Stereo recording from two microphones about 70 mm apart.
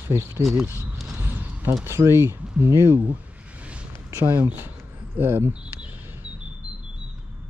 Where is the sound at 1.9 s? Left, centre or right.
Right.